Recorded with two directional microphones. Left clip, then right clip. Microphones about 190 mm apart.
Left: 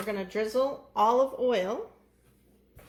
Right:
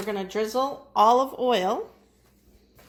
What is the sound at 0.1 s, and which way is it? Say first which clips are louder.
Speech: right 3 dB; 30° right (ahead or behind).